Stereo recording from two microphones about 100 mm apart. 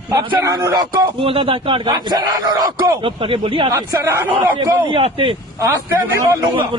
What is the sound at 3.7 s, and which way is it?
Speech, 30° right (ahead or behind).